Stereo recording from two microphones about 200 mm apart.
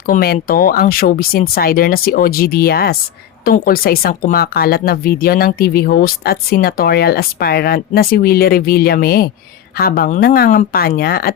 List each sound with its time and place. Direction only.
0.1 s speech: 45° left (ahead or behind)